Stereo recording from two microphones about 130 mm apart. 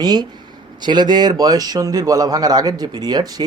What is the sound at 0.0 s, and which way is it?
A man's voice, 30° right (ahead or behind).